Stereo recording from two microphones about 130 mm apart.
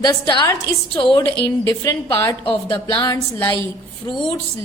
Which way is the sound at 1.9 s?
20° left (ahead or behind).